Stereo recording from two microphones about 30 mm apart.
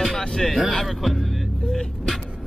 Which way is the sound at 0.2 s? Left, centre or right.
Left.